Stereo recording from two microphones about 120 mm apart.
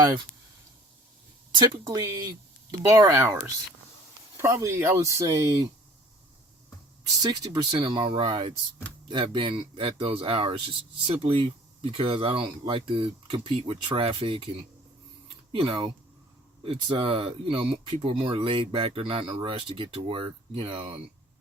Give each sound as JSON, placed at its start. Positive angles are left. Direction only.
{"t": 1.5, "sound": "speech", "side_deg": -40}
{"t": 7.2, "sound": "speech", "side_deg": -35}
{"t": 15.5, "sound": "speech", "side_deg": -40}